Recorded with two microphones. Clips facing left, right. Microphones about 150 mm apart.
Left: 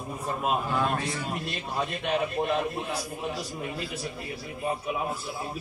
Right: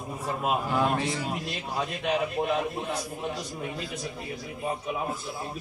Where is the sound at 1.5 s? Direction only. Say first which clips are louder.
Even; centre (ahead or behind).